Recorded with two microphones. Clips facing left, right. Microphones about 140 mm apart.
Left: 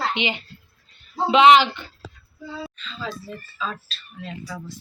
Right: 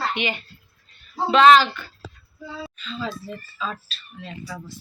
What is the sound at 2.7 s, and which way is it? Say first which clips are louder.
Speech: right 2 dB; centre (ahead or behind).